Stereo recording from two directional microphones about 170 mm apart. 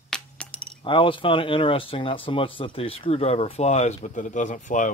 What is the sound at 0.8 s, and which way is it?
Speech, 30° left (ahead or behind).